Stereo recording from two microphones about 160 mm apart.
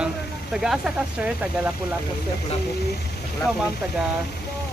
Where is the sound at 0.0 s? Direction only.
5° right (ahead or behind).